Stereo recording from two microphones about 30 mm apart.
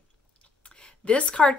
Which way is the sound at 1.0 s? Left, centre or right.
Left.